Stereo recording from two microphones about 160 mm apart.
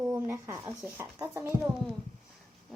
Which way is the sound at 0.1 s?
20° right (ahead or behind).